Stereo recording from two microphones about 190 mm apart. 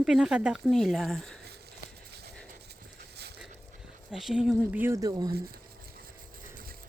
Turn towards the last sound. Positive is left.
turn(degrees=-20)  # may be behind; listen again after turning